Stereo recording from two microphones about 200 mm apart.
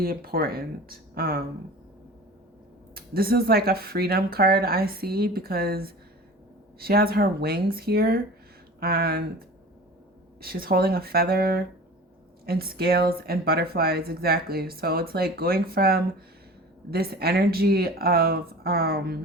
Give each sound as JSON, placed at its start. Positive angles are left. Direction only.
{"t": 0.0, "sound": "speech", "side_deg": -45}
{"t": 2.9, "sound": "speech", "side_deg": -50}
{"t": 10.4, "sound": "speech", "side_deg": -50}